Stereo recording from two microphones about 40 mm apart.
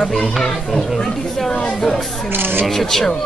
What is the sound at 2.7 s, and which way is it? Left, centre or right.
Speech, centre.